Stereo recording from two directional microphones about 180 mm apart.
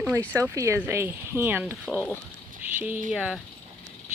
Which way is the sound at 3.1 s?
5° right (ahead or behind).